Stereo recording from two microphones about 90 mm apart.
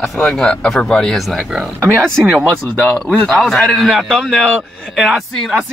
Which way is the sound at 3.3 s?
5° left (ahead or behind).